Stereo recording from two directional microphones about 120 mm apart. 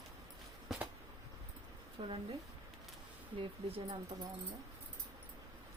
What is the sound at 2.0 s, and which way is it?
Speech, 50° right (ahead or behind).